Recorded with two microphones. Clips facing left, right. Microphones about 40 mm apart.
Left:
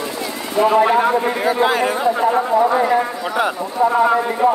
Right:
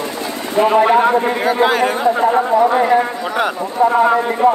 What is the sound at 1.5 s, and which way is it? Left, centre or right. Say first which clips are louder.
A man's voice: right 2 dB; right.